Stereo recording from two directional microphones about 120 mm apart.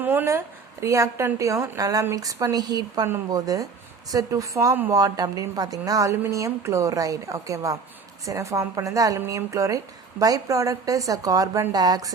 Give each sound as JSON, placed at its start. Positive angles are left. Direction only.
{"t": 0.0, "sound": "a woman's voice", "side_deg": -15}